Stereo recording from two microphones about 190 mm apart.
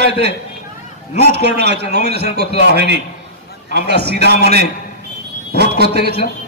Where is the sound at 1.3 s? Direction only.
60° right (ahead or behind).